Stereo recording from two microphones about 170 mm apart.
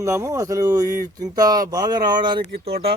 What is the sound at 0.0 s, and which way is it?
Speech, 15° right (ahead or behind).